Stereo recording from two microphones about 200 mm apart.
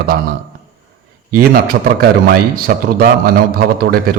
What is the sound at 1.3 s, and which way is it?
A man's voice, 50° right (ahead or behind).